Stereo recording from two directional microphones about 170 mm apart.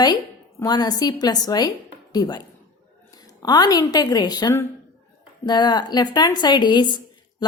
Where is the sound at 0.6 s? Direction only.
25° left (ahead or behind).